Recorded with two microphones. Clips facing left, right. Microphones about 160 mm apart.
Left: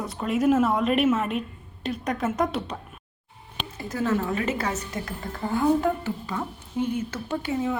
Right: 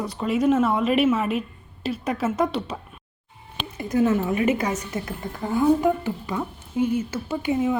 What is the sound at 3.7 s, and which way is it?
Speech, 15° right (ahead or behind).